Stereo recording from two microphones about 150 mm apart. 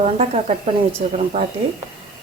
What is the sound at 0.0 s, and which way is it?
Speech, 45° right (ahead or behind).